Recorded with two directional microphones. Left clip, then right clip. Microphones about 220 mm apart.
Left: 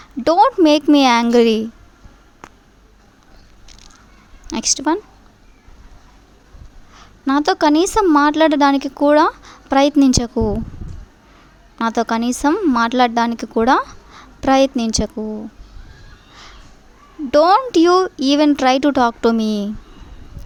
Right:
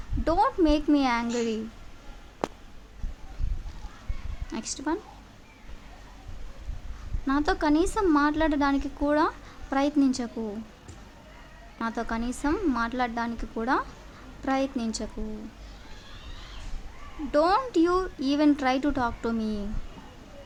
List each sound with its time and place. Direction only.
0.3 s a woman's voice: 40° left (ahead or behind)
4.4 s speech: 40° left (ahead or behind)
7.3 s a woman's voice: 40° left (ahead or behind)
11.8 s a woman's voice: 40° left (ahead or behind)
17.3 s a woman's voice: 40° left (ahead or behind)